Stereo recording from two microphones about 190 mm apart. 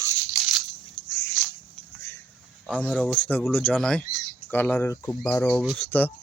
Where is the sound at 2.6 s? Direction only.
5° left (ahead or behind).